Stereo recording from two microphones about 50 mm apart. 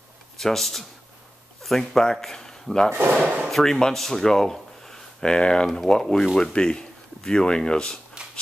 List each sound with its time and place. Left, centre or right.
0.4 s speech: centre